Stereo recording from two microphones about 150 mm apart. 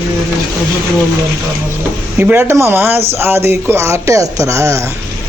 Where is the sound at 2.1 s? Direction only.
15° right (ahead or behind).